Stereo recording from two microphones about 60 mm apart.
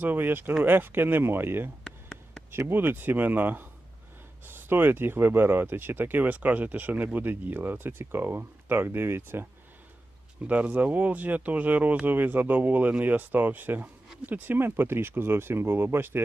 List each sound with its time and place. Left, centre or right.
0.0 s speech: right
10.4 s speech: right